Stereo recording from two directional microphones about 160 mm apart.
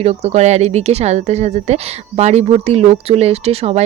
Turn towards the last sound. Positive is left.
turn(degrees=-40)  # may be behind; listen again after turning